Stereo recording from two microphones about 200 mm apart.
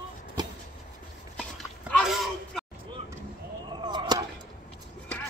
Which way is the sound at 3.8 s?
20° right (ahead or behind).